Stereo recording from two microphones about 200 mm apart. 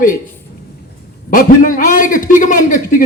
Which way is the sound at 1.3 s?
45° left (ahead or behind).